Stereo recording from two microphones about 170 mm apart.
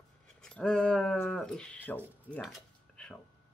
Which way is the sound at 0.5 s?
5° left (ahead or behind).